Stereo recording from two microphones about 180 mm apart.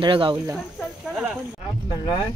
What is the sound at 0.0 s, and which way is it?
Speech, 30° right (ahead or behind).